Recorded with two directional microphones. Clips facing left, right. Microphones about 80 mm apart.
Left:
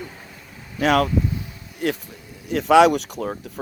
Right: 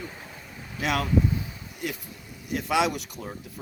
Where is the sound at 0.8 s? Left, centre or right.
Left.